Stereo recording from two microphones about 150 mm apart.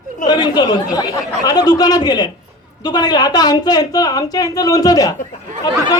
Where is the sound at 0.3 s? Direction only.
30° left (ahead or behind).